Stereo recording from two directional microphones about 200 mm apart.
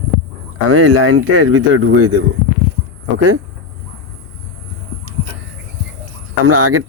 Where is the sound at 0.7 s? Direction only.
90° right.